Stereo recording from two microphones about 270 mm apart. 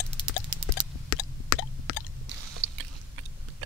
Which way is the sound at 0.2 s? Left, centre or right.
Centre.